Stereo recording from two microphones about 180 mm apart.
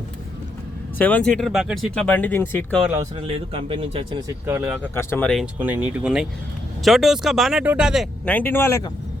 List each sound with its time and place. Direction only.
0.9 s speech: 10° left (ahead or behind)
2.8 s speech: 10° right (ahead or behind)
3.2 s speech: 30° right (ahead or behind)
4.4 s speech: 10° right (ahead or behind)
4.9 s speech: 10° left (ahead or behind)
5.5 s speech: 10° right (ahead or behind); by 8.9 s 15° left (ahead or behind)